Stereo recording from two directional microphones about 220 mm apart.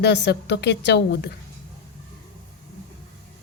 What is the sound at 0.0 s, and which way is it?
Speech, 50° left (ahead or behind).